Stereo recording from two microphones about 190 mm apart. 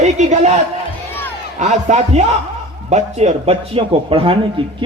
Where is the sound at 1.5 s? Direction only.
40° right (ahead or behind).